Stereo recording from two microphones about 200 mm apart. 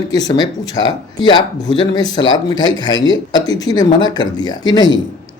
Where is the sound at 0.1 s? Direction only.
20° left (ahead or behind).